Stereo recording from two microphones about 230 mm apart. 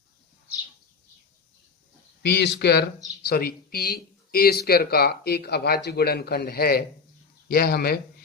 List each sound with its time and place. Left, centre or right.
2.2 s a man's voice: left